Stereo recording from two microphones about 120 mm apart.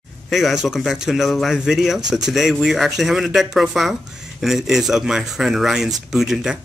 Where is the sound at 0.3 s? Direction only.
Centre (ahead or behind).